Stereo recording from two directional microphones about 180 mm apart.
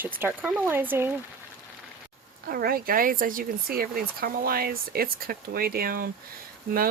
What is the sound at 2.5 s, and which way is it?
Speech, 55° right (ahead or behind).